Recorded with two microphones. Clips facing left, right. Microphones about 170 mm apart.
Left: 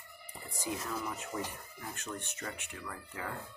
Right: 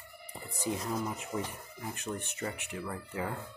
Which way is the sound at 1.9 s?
15° right (ahead or behind).